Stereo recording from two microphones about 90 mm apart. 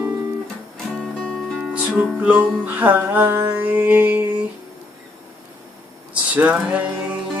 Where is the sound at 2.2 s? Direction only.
20° right (ahead or behind).